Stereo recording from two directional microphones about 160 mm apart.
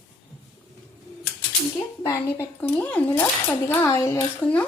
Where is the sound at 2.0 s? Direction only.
15° left (ahead or behind).